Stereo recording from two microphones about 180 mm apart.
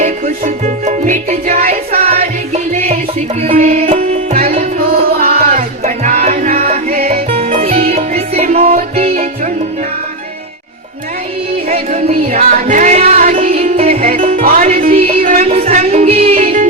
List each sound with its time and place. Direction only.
0.0 s music: 45° right (ahead or behind)
3.5 s music: 40° right (ahead or behind)
5.2 s music: 55° right (ahead or behind)
5.5 s music: 40° right (ahead or behind)
11.7 s music: 40° right (ahead or behind)
13.5 s music: 35° right (ahead or behind)
15.4 s music: 35° right (ahead or behind)
16.3 s music: 45° right (ahead or behind)